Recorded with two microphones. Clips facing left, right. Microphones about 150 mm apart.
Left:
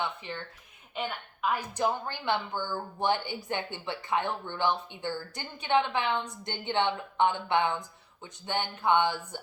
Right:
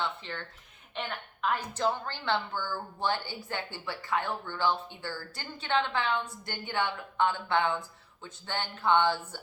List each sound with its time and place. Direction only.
0.0 s a woman's voice: 15° left (ahead or behind)